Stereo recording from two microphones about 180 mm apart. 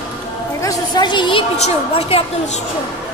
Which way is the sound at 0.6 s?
25° left (ahead or behind).